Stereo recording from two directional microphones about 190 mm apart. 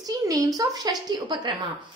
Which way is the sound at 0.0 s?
20° right (ahead or behind).